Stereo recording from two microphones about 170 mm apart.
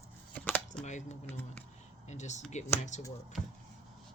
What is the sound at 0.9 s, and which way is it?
Speech, 45° left (ahead or behind).